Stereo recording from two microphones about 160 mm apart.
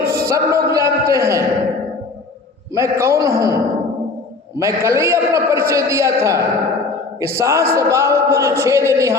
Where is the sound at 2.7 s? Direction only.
15° right (ahead or behind).